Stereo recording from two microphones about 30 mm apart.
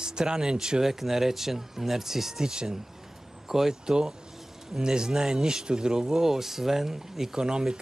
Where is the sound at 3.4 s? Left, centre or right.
Centre.